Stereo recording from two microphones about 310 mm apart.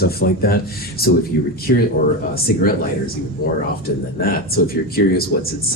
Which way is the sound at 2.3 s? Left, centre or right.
Left.